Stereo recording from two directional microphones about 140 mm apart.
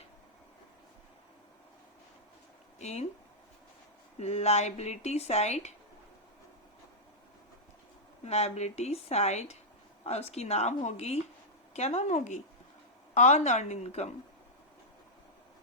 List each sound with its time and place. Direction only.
2.8 s speech: 50° left (ahead or behind)
4.2 s speech: 50° left (ahead or behind)
8.2 s a woman's voice: 50° left (ahead or behind)